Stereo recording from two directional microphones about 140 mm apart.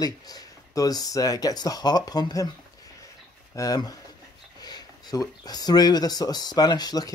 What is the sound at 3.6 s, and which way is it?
Speech, 25° left (ahead or behind).